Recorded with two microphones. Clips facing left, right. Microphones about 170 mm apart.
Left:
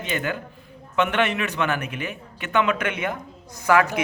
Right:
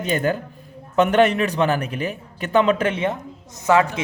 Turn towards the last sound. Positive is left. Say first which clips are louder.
# right 2 dB
turn(degrees=-25)  # may be behind; listen again after turning